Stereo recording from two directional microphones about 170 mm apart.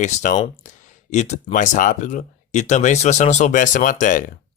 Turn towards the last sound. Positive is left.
turn(degrees=50)  # may be behind; listen again after turning